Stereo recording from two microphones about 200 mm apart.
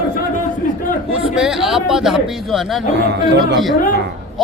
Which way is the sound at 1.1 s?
5° right (ahead or behind).